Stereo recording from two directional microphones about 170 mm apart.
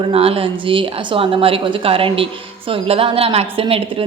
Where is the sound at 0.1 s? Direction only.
35° right (ahead or behind).